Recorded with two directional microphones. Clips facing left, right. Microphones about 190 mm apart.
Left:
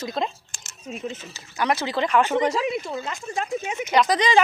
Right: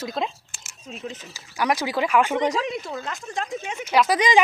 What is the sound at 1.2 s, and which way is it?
Speech, 10° right (ahead or behind).